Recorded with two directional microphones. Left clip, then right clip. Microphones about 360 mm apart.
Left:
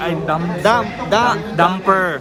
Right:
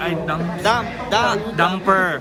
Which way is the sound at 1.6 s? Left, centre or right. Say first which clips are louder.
Left 2 dB; centre.